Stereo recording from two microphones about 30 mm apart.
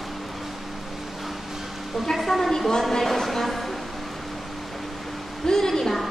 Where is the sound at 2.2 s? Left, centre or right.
Centre.